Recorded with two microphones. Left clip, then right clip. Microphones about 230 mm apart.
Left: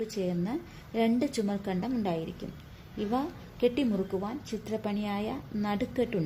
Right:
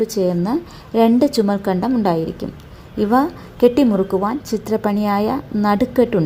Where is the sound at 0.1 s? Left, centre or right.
Centre.